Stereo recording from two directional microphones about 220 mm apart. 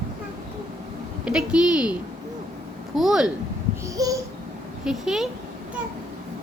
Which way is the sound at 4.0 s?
15° right (ahead or behind).